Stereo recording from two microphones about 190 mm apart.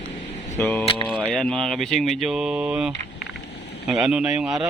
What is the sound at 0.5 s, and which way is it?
Speech, 10° left (ahead or behind).